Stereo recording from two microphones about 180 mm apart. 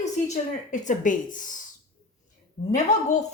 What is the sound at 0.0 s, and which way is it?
A woman's voice, 40° left (ahead or behind).